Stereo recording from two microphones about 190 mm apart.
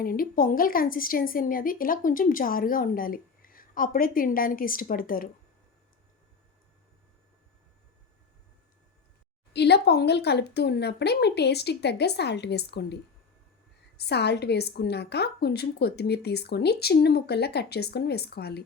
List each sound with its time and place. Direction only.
0.0 s speech: 50° left (ahead or behind)
9.5 s a woman's voice: 60° left (ahead or behind)